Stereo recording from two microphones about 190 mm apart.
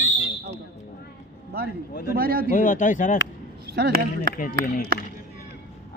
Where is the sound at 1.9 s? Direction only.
55° left (ahead or behind).